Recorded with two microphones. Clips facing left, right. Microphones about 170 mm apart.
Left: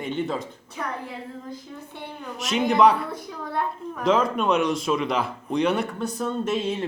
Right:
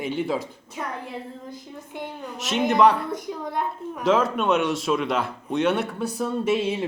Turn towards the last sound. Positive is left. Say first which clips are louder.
# right 2 dB
turn(degrees=-10)  # may be behind; listen again after turning